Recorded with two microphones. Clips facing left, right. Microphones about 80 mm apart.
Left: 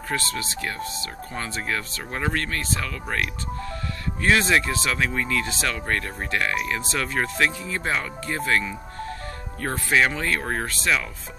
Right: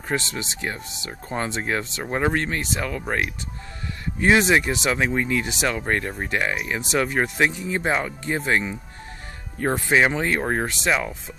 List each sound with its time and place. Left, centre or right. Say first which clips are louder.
0.1 s speech: right 1 dB; centre